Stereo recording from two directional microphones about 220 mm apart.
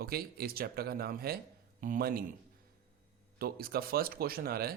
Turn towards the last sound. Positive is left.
turn(degrees=-45)  # may be behind; listen again after turning